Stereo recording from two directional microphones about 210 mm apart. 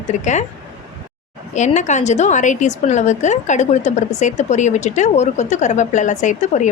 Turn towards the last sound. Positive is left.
turn(degrees=35)  # may be behind; listen again after turning